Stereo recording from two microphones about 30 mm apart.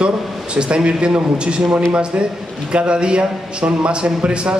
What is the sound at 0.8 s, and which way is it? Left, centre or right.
A man's voice, right.